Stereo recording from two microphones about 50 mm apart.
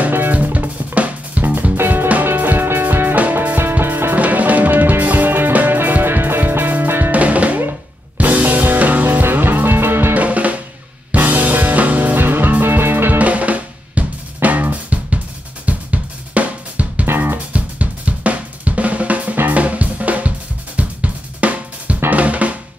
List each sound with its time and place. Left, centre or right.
0.1 s drum kit: right
1.8 s music: right
7.2 s drum: right
8.2 s music: right
10.1 s drum: right
11.1 s music: right
13.2 s drum: right
15.6 s drum kit: right
17.0 s music: right
17.5 s drum kit: right
22.1 s drum: right